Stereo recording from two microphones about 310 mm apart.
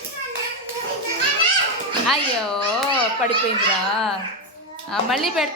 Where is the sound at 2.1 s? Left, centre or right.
Centre.